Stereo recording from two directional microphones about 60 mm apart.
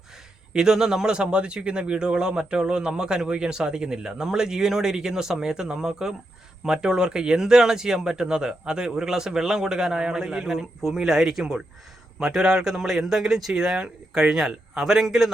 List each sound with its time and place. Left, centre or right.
0.5 s speech: centre